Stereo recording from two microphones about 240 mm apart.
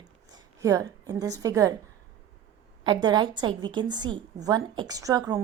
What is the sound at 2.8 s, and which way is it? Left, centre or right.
A woman's voice, centre.